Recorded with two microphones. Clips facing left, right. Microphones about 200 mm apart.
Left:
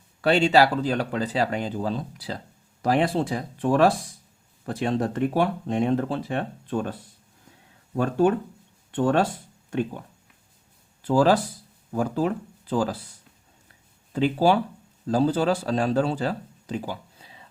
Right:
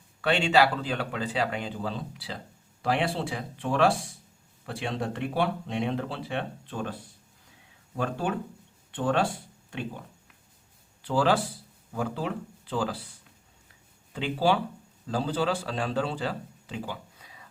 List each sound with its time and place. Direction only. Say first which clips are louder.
0.2 s speech: left 4 dB; 40° left (ahead or behind)
7.9 s speech: left 8 dB; 45° left (ahead or behind)
11.0 s speech: left 5 dB; 45° left (ahead or behind)
14.1 s speech: left 5 dB; 45° left (ahead or behind)
17.2 s a sound: left 2 dB; 30° left (ahead or behind)